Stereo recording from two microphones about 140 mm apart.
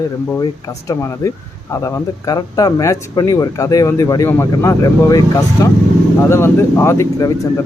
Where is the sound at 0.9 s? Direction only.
20° left (ahead or behind).